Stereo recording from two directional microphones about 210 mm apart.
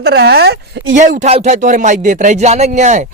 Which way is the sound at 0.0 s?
50° right (ahead or behind).